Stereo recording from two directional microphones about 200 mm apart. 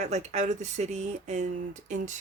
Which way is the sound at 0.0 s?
35° right (ahead or behind).